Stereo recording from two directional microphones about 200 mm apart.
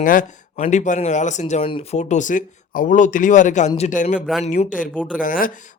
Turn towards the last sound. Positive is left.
turn(degrees=45)  # may be behind; listen again after turning